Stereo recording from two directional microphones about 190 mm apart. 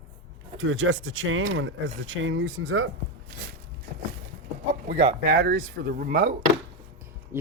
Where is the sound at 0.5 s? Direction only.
90° right.